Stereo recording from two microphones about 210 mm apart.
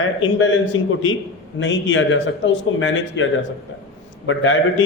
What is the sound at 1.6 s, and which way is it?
A man's voice, 60° left (ahead or behind).